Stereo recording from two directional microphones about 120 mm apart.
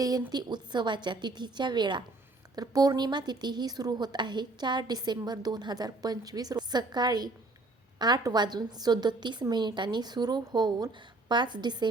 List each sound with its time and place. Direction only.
0.0 s a woman's voice: 35° right (ahead or behind)